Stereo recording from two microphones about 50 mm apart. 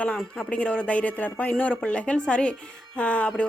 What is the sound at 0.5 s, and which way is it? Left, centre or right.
A woman's voice, left.